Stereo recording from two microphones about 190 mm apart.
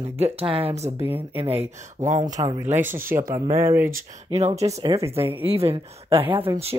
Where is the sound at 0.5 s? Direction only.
30° right (ahead or behind).